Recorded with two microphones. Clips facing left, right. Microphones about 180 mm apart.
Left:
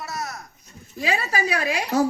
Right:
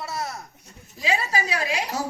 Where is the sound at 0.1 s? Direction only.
30° right (ahead or behind).